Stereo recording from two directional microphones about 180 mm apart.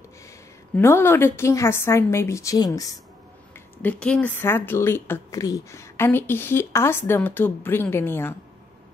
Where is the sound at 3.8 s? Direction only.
5° left (ahead or behind).